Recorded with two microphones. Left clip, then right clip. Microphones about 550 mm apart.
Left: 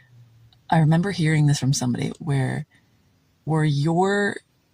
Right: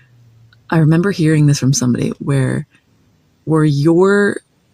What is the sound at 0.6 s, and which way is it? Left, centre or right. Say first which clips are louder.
Speech: right 7 dB; left.